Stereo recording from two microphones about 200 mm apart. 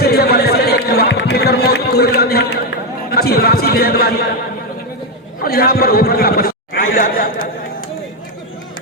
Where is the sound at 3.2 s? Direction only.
50° left (ahead or behind).